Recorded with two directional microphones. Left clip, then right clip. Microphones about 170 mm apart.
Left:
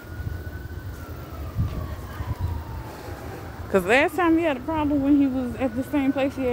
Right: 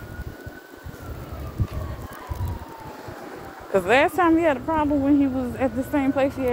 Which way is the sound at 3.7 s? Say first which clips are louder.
Right 1 dB; 35° left (ahead or behind).